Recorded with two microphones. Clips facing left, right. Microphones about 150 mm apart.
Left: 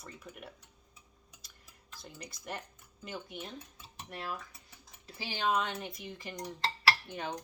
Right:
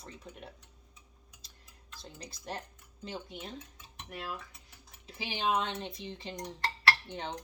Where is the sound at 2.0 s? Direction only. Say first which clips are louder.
Even; 30° right (ahead or behind).